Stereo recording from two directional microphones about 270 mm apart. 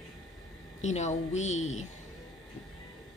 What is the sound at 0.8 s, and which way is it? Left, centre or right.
Speech, left.